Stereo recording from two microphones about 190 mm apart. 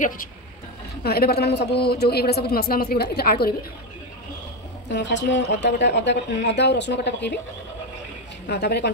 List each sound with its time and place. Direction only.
1.0 s speech: 55° left (ahead or behind)
4.9 s speech: 70° left (ahead or behind)
8.5 s speech: 60° left (ahead or behind)